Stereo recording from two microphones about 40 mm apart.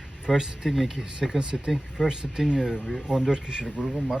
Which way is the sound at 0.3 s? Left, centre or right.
Centre.